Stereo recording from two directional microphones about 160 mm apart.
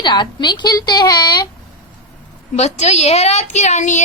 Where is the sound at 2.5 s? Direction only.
45° left (ahead or behind).